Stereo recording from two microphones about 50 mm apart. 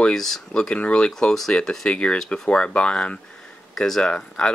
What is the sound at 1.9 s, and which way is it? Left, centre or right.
Speech, left.